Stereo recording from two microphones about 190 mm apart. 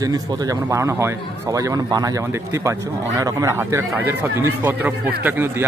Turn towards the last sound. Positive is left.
turn(degrees=-10)  # may be behind; listen again after turning